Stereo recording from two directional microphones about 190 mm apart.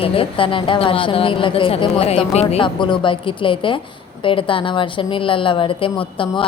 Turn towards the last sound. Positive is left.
turn(degrees=25)  # may be behind; listen again after turning